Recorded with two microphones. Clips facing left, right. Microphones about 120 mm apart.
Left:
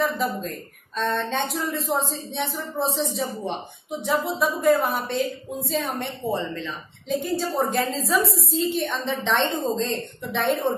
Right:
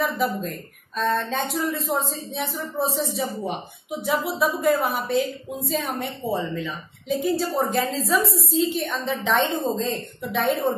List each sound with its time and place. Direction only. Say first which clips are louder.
0.0 s speech: even; centre (ahead or behind)